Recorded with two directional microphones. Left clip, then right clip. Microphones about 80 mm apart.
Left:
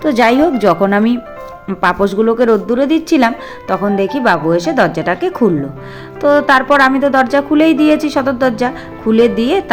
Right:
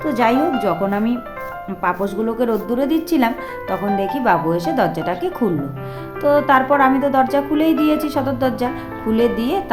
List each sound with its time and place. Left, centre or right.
0.0 s speech: left
1.8 s speech: left
2.0 s a woman's voice: left